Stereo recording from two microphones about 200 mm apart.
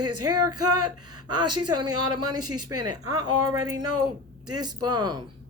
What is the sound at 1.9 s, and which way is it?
Speech, 90° right.